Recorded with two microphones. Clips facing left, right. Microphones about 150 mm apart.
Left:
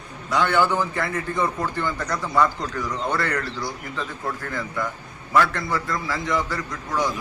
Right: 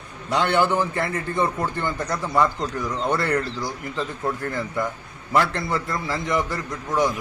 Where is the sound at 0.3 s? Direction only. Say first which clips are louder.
Even; 25° right (ahead or behind).